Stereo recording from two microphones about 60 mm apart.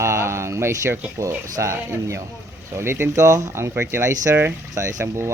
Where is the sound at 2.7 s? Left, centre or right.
Right.